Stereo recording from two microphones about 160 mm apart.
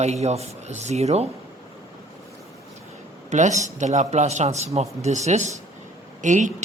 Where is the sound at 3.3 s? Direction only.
50° right (ahead or behind).